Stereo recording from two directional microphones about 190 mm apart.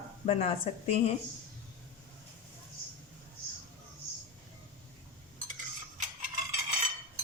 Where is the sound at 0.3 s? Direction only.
35° left (ahead or behind).